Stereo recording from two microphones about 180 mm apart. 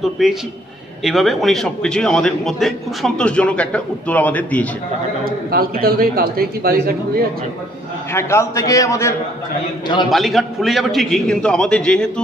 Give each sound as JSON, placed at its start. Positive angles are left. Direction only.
{"t": 0.0, "sound": "a man's voice", "side_deg": 0}
{"t": 5.2, "sound": "a man's voice", "side_deg": -55}
{"t": 8.1, "sound": "a man's voice", "side_deg": 15}
{"t": 10.1, "sound": "a man's voice", "side_deg": 0}